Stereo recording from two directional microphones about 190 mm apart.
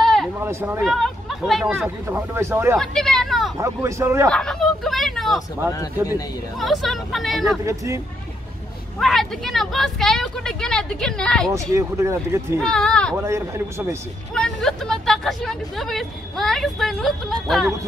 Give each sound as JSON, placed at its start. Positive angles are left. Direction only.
{"t": 0.0, "sound": "a sound", "side_deg": 0}
{"t": 0.4, "sound": "speech", "side_deg": -10}
{"t": 0.8, "sound": "speech", "side_deg": 0}
{"t": 2.8, "sound": "vehicle", "side_deg": 0}
{"t": 3.5, "sound": "speech", "side_deg": -15}
{"t": 4.3, "sound": "speech", "side_deg": 5}
{"t": 6.6, "sound": "a woman's voice", "side_deg": 0}
{"t": 7.6, "sound": "speech", "side_deg": -15}
{"t": 9.0, "sound": "a woman's voice", "side_deg": 0}
{"t": 11.5, "sound": "speech", "side_deg": -15}
{"t": 12.5, "sound": "a woman's voice", "side_deg": 5}
{"t": 13.1, "sound": "speech", "side_deg": -15}
{"t": 14.3, "sound": "a woman's voice", "side_deg": 5}